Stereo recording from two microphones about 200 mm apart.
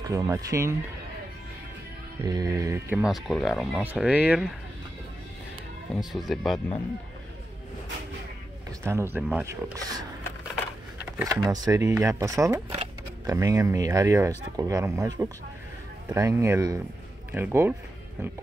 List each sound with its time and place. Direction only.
0.0 s speech: 15° right (ahead or behind)
2.2 s music: 20° right (ahead or behind)
3.0 s speech: centre (ahead or behind)
5.9 s speech: centre (ahead or behind)
8.8 s speech: 10° right (ahead or behind)
11.1 s speech: 15° right (ahead or behind)
12.6 s a sound: 30° right (ahead or behind)
13.3 s speech: 15° right (ahead or behind)